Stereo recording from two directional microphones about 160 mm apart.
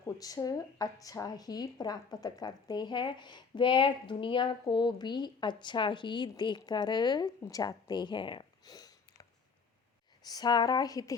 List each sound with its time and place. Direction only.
0.2 s speech: 25° left (ahead or behind)
10.2 s speech: 25° left (ahead or behind)